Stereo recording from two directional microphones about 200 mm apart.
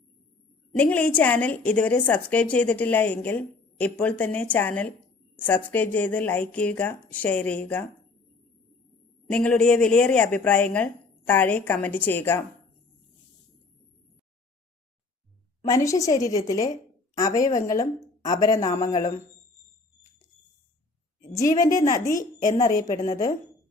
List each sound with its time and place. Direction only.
0.8 s speech: 5° left (ahead or behind)
9.3 s speech: 5° left (ahead or behind)
15.7 s speech: 15° left (ahead or behind)
21.3 s speech: 15° left (ahead or behind)
22.1 s a woman's voice: 40° left (ahead or behind)